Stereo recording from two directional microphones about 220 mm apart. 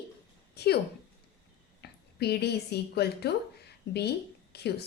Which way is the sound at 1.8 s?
45° left (ahead or behind).